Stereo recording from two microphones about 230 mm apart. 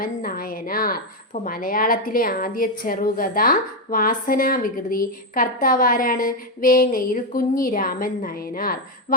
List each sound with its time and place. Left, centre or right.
0.0 s a woman's voice: left